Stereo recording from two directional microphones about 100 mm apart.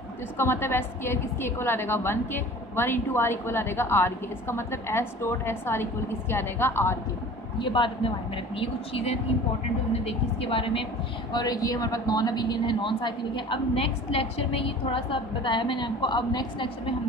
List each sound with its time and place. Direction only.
0.4 s a woman's voice: 25° left (ahead or behind)
7.5 s a man's voice: 55° left (ahead or behind)
8.5 s a woman's voice: 75° left (ahead or behind)
11.3 s a woman's voice: 40° left (ahead or behind)